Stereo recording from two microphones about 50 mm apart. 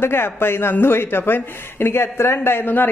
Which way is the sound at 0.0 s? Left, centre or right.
Left.